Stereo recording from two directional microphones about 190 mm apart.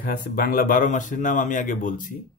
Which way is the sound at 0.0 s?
45° left (ahead or behind).